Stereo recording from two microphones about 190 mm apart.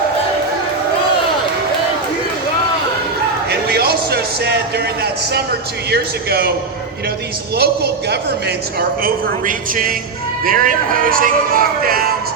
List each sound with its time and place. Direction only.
3.5 s a sound: 55° right (ahead or behind)
5.9 s speech: 55° right (ahead or behind)
7.5 s a man's voice: 55° right (ahead or behind)